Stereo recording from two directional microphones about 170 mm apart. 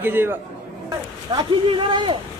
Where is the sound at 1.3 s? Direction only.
30° right (ahead or behind).